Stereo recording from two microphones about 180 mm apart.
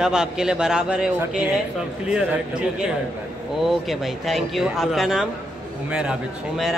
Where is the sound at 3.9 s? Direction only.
Centre (ahead or behind).